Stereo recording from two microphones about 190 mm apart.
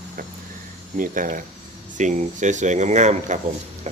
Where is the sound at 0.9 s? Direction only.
45° right (ahead or behind).